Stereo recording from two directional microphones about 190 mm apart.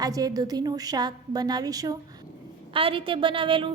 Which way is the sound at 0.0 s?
20° right (ahead or behind).